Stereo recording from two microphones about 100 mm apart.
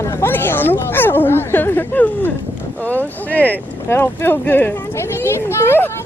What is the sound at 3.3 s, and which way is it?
A child's voice, 15° left (ahead or behind).